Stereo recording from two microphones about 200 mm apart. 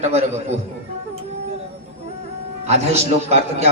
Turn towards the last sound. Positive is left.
turn(degrees=-30)  # may be behind; listen again after turning